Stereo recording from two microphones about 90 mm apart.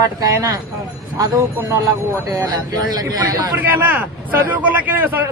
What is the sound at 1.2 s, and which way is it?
Speech, 45° right (ahead or behind).